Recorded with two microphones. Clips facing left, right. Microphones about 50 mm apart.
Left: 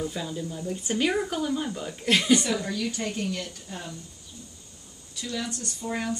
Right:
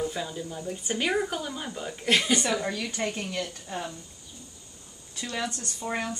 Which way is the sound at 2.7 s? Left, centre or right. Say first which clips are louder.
Left 1 dB; right.